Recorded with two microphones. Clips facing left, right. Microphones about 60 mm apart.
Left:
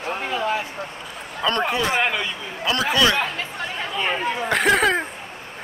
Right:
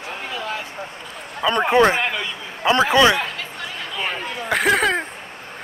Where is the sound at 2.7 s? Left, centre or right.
Right.